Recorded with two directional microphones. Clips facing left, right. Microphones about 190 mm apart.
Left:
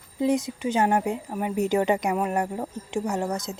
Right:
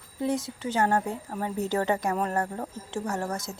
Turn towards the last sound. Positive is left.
turn(degrees=20)  # may be behind; listen again after turning